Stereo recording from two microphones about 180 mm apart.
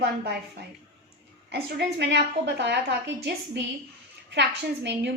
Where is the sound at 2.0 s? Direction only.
75° right (ahead or behind).